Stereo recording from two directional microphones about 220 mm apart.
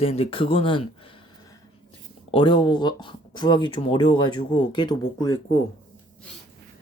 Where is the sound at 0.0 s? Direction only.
25° left (ahead or behind).